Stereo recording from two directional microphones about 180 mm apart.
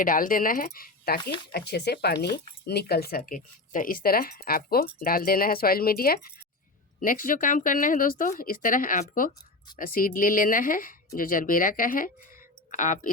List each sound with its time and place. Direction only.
0.0 s speech: 50° left (ahead or behind)
1.5 s speech: 65° left (ahead or behind); by 13.1 s 45° left (ahead or behind)